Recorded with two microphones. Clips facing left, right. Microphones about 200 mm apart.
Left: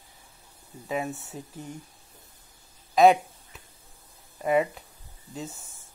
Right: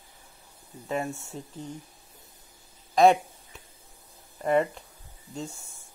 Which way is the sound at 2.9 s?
Centre (ahead or behind).